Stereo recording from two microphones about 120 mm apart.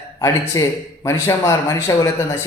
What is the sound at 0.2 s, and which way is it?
A man's voice, 30° left (ahead or behind).